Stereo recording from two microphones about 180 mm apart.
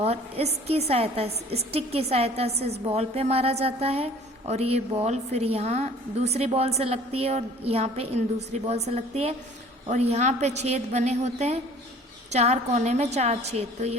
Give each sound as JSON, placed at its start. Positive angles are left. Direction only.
{"t": 0.0, "sound": "a woman's voice", "side_deg": -35}